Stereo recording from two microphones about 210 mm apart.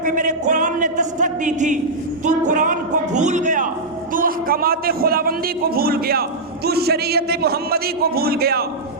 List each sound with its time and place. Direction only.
0.0 s a man's voice: 35° right (ahead or behind)